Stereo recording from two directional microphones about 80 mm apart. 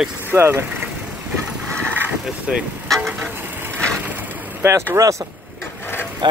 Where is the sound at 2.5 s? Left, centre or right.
Centre.